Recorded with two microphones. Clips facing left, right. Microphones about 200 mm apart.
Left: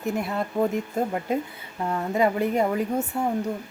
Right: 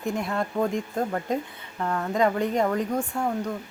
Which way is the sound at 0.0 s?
5° left (ahead or behind).